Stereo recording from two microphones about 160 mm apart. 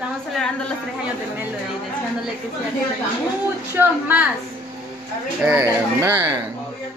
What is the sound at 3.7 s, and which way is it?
Speech, 10° right (ahead or behind).